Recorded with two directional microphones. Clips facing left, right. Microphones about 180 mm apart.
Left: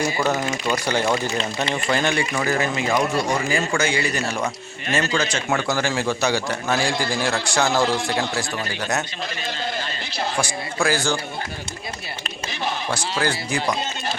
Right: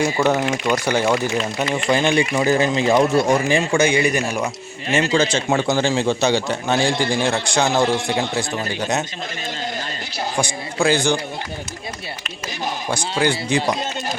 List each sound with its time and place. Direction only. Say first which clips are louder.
0.2 s a man's voice: right 4 dB; 10° right (ahead or behind)
10.3 s speech: right 5 dB; 15° right (ahead or behind)
12.9 s speech: right 6 dB; 15° right (ahead or behind)